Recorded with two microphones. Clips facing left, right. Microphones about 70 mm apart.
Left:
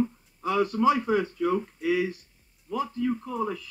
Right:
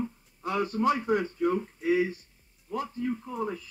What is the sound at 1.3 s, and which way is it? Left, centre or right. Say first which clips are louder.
Speech: left 1 dB; left.